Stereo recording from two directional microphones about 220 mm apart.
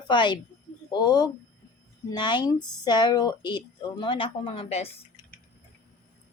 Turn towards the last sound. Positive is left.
turn(degrees=25)  # may be behind; listen again after turning